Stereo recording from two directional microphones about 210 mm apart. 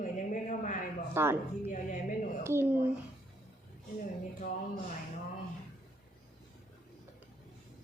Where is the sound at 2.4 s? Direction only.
10° right (ahead or behind).